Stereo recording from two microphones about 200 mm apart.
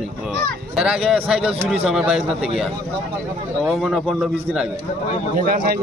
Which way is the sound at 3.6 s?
Centre (ahead or behind).